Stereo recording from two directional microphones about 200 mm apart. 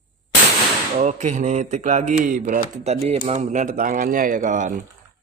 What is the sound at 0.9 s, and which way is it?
Speech, 35° right (ahead or behind).